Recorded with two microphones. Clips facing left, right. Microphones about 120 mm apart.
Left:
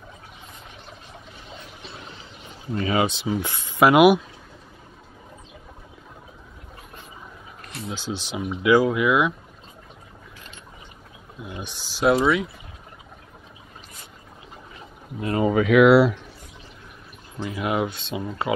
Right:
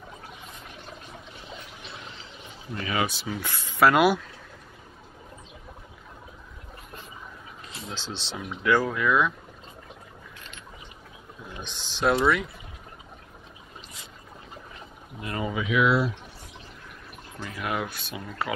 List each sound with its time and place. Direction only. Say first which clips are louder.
2.7 s speech: left 6 dB; 30° left (ahead or behind)
7.6 s a sound: left 7 dB; 65° left (ahead or behind)
7.9 s speech: left 6 dB; 15° left (ahead or behind)
11.6 s speech: left 4 dB; 10° left (ahead or behind)
15.2 s speech: left 9 dB; 30° left (ahead or behind)
15.5 s speech: left 9 dB; 60° left (ahead or behind); by 16.2 s 75° left (ahead or behind)
17.4 s speech: left 6 dB; 20° left (ahead or behind)